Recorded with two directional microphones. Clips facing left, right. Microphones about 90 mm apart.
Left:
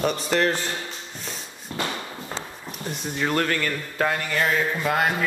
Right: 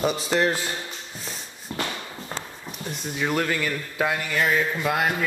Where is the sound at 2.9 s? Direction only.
Centre (ahead or behind).